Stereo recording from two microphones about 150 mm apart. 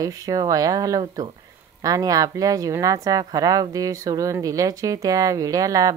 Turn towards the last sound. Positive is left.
turn(degrees=-25)  # may be behind; listen again after turning